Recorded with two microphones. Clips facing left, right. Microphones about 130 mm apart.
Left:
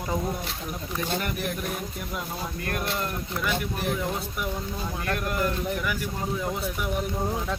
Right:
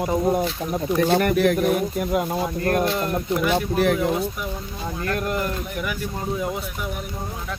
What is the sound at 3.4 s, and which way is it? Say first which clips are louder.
Speech: right 8 dB; 75° right (ahead or behind).